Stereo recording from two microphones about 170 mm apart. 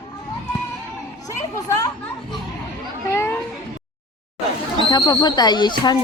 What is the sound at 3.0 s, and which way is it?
Speech, 15° left (ahead or behind).